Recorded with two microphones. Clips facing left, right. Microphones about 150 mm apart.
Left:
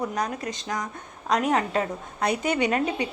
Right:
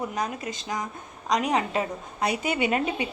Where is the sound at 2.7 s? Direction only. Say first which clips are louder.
Left 1 dB; 35° left (ahead or behind).